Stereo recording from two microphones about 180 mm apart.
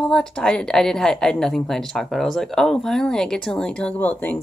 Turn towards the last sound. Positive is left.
turn(degrees=10)  # may be behind; listen again after turning